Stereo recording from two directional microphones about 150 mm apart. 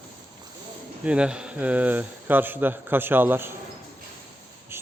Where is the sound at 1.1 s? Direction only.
5° right (ahead or behind).